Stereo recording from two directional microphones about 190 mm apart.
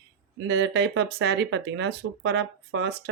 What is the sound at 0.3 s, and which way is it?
Speech, 80° right.